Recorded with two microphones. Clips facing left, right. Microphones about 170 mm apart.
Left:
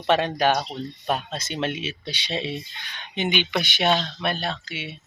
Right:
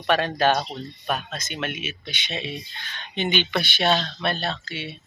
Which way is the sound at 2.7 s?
15° left (ahead or behind).